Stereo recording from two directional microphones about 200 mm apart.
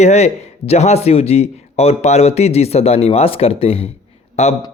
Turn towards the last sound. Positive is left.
turn(degrees=30)  # may be behind; listen again after turning